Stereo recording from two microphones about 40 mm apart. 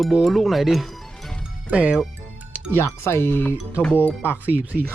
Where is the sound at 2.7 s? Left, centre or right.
Left.